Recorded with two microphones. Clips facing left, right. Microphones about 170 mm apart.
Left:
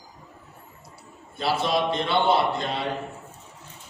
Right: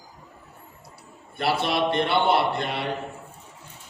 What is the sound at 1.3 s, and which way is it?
A man's voice, 65° right (ahead or behind).